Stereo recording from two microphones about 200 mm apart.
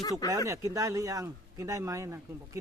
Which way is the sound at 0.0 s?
20° left (ahead or behind).